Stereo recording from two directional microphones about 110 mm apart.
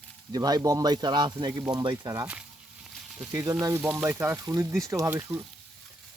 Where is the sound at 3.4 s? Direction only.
30° right (ahead or behind).